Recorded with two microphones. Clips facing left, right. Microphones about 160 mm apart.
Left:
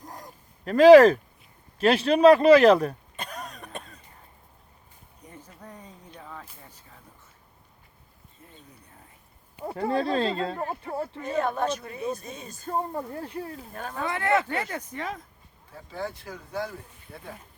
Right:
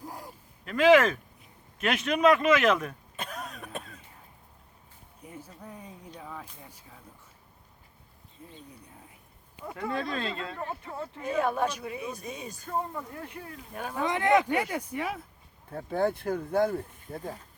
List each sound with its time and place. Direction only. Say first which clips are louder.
0.0 s a sound: right 1 dB; 10° right (ahead or behind)
0.6 s speech: left 8 dB; 35° left (ahead or behind)
3.2 s cough: left 1 dB; centre (ahead or behind)
5.2 s a sound: right 1 dB; 10° right (ahead or behind)
9.6 s speech: left 6 dB; 35° left (ahead or behind)
11.3 s speech: left 1 dB; 10° right (ahead or behind)
12.6 s speech: left 4 dB; 35° left (ahead or behind)
13.7 s speech: right 2 dB; 10° right (ahead or behind)
15.7 s speech: right 7 dB; 55° right (ahead or behind)